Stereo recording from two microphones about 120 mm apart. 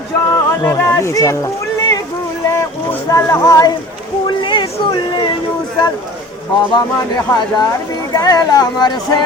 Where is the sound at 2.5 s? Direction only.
25° left (ahead or behind).